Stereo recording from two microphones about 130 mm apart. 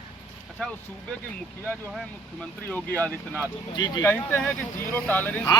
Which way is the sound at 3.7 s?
35° left (ahead or behind).